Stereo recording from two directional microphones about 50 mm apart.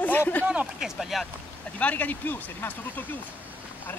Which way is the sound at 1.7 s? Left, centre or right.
Left.